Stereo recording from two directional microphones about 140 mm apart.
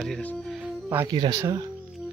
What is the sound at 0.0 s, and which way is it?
Speech, 5° left (ahead or behind).